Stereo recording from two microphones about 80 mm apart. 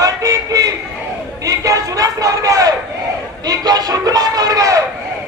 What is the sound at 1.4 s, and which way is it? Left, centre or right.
A man's voice, right.